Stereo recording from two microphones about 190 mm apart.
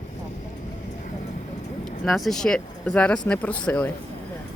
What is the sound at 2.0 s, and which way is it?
Speech, centre (ahead or behind).